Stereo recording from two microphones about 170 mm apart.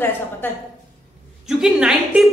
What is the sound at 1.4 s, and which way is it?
Speech, 5° right (ahead or behind).